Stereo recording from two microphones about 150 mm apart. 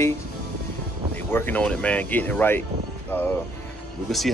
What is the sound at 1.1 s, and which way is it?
Speech, 15° left (ahead or behind).